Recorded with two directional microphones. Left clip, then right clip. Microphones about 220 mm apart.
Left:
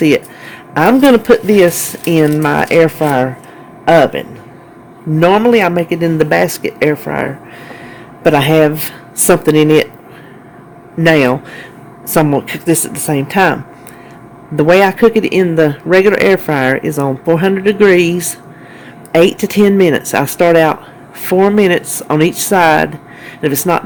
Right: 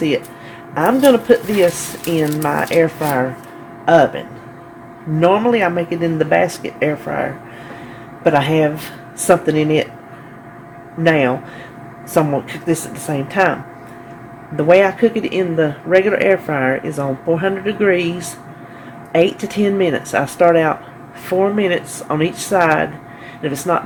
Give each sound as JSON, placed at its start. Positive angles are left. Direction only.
{"t": 0.7, "sound": "a man's voice", "side_deg": 55}
{"t": 5.2, "sound": "a man's voice", "side_deg": 50}
{"t": 11.0, "sound": "a man's voice", "side_deg": 55}
{"t": 14.5, "sound": "a man's voice", "side_deg": 55}